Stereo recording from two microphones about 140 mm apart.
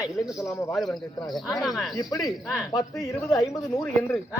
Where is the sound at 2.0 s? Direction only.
25° left (ahead or behind).